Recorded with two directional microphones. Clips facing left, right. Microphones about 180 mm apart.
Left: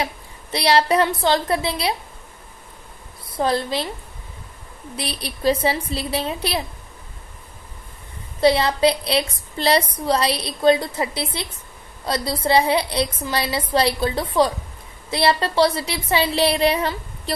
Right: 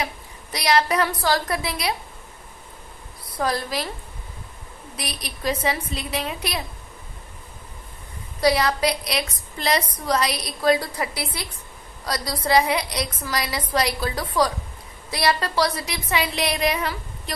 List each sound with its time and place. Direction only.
0.0 s a woman's voice: 30° left (ahead or behind)
3.3 s a woman's voice: 25° left (ahead or behind)
4.9 s a woman's voice: 30° left (ahead or behind)
8.4 s a woman's voice: 25° left (ahead or behind)